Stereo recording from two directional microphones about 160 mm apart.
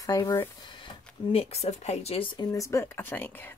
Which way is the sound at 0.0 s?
25° left (ahead or behind).